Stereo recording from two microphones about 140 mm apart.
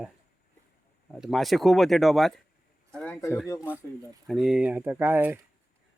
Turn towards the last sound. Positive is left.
turn(degrees=-15)  # may be behind; listen again after turning